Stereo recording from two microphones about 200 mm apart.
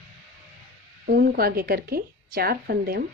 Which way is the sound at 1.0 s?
50° right (ahead or behind).